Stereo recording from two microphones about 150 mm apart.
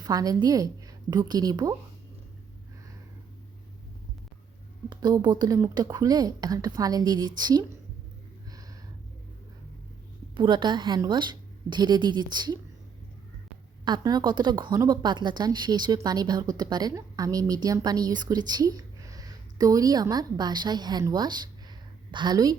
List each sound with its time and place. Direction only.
0.0 s a woman's voice: 25° right (ahead or behind)
4.9 s a woman's voice: 30° right (ahead or behind)
10.3 s a woman's voice: 30° right (ahead or behind)
13.8 s a woman's voice: 30° right (ahead or behind)